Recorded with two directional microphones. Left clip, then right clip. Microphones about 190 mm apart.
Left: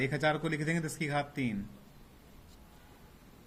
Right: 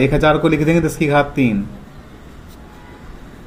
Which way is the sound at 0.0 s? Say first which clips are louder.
Right 17 dB; 40° left (ahead or behind).